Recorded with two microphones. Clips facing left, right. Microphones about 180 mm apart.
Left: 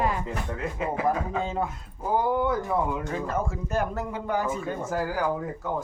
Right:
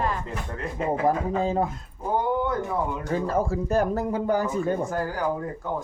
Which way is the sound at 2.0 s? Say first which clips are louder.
Even; 5° left (ahead or behind).